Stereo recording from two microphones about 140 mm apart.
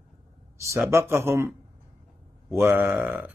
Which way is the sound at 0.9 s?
20° right (ahead or behind).